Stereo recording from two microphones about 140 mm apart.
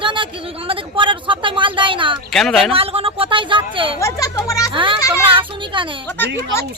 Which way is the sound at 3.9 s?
25° left (ahead or behind).